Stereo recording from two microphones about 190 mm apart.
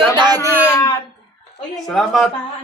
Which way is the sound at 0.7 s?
15° left (ahead or behind).